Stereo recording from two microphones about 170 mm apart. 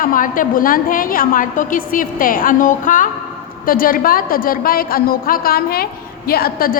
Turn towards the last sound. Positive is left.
turn(degrees=60)  # may be behind; listen again after turning